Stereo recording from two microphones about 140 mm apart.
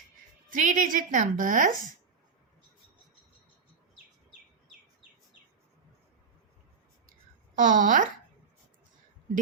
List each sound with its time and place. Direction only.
0.5 s a woman's voice: 65° right (ahead or behind)
7.5 s a woman's voice: 75° right (ahead or behind)